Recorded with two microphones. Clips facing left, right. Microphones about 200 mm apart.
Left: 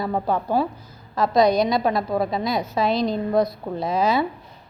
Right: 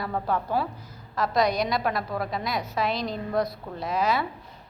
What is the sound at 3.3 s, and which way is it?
Speech, 25° left (ahead or behind).